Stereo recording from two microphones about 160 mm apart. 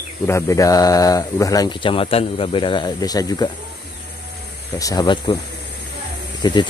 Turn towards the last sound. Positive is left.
turn(degrees=25)  # may be behind; listen again after turning